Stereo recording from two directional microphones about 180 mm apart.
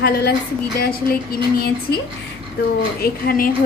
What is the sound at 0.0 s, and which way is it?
A woman's voice, 65° left (ahead or behind).